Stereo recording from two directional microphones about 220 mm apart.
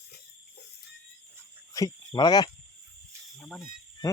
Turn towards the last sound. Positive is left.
turn(degrees=0)  # may be behind; listen again after turning